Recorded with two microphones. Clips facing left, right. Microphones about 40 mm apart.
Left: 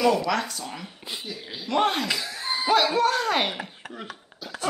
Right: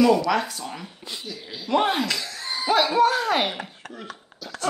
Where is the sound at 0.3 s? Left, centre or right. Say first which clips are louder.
Right 3 dB; centre.